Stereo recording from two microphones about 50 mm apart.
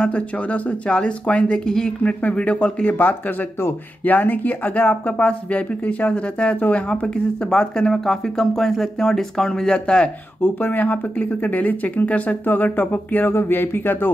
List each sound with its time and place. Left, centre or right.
0.1 s speech: left
4.0 s speech: left
6.9 s speech: centre
10.4 s speech: left